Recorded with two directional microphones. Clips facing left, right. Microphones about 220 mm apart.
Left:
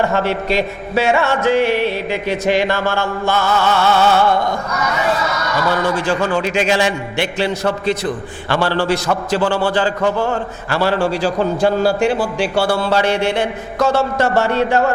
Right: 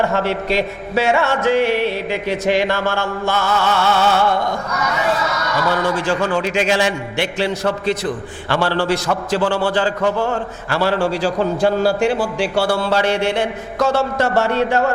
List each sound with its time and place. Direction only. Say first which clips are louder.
0.0 s music: left 1 dB; 20° left (ahead or behind)
3.9 s speech: left 2 dB; 15° left (ahead or behind)
6.4 s music: left 1 dB; 15° left (ahead or behind)
8.7 s music: left 1 dB; 15° left (ahead or behind)
9.4 s speech: left 1 dB; 30° left (ahead or behind)
12.5 s speech: left 1 dB; 30° left (ahead or behind)
12.9 s music: left 1 dB; 15° left (ahead or behind)